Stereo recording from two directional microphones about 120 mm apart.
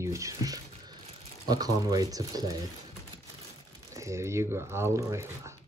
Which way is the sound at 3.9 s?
25° right (ahead or behind).